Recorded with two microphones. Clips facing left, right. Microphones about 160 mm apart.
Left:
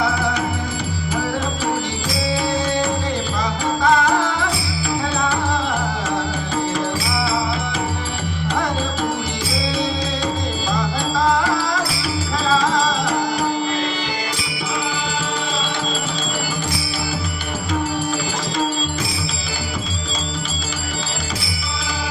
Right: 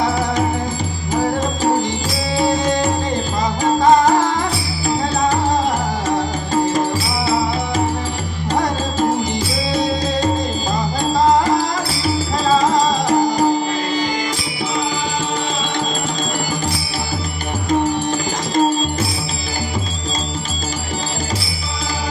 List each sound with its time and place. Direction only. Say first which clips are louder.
3.6 s music: right 5 dB; 40° right (ahead or behind)
10.7 s music: right 1 dB; 40° right (ahead or behind)